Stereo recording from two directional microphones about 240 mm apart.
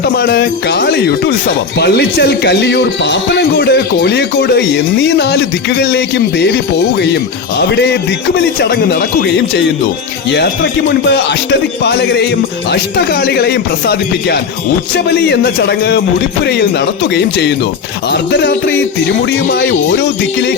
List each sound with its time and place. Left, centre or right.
0.0 s speech: left
8.7 s speech: left
10.3 s speech: left